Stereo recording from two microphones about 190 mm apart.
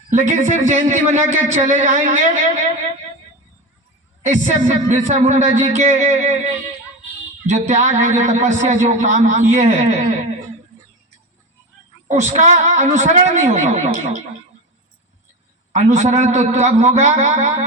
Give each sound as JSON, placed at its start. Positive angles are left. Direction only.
{"t": 0.1, "sound": "a man's voice", "side_deg": -40}
{"t": 4.3, "sound": "a man's voice", "side_deg": -40}
{"t": 12.0, "sound": "a man's voice", "side_deg": -40}
{"t": 15.7, "sound": "a man's voice", "side_deg": -40}